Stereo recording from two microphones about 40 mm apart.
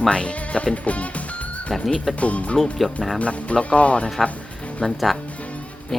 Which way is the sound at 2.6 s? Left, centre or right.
Centre.